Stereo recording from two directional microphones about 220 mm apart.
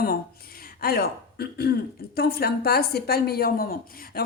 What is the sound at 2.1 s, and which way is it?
A woman's voice, 45° left (ahead or behind).